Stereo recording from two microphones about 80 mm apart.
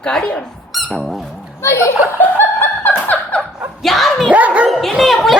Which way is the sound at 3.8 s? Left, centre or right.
Centre.